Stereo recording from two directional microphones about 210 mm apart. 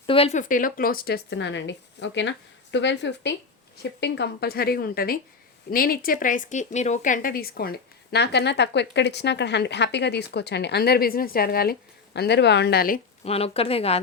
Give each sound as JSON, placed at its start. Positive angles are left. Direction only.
{"t": 0.0, "sound": "a woman's voice", "side_deg": 25}
{"t": 13.2, "sound": "speech", "side_deg": 30}